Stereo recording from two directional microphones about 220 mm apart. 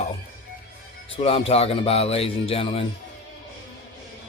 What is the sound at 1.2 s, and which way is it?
Speech, 25° left (ahead or behind).